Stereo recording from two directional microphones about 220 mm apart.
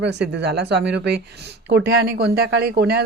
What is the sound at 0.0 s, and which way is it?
A woman's voice, 50° right (ahead or behind).